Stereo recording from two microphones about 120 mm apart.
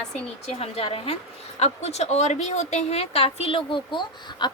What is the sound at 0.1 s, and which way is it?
A woman's voice, 60° left (ahead or behind).